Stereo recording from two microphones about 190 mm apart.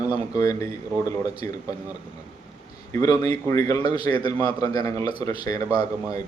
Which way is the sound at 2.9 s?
20° left (ahead or behind).